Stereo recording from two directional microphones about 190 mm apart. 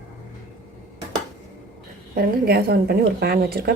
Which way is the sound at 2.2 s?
55° right (ahead or behind).